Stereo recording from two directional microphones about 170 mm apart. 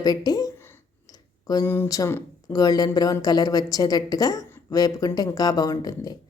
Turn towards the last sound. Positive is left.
turn(degrees=20)  # may be behind; listen again after turning